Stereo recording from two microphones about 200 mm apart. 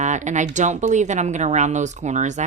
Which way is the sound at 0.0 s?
35° right (ahead or behind).